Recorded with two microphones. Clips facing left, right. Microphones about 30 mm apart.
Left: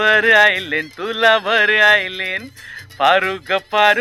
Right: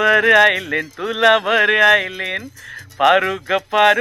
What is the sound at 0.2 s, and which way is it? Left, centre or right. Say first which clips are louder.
Speech: even; centre.